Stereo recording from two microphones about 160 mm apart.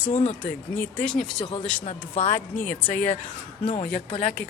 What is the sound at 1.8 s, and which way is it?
Speech, 40° left (ahead or behind).